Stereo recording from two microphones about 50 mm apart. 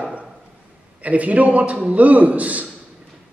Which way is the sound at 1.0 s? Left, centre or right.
Right.